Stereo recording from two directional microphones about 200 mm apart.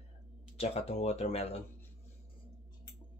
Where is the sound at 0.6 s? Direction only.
30° left (ahead or behind).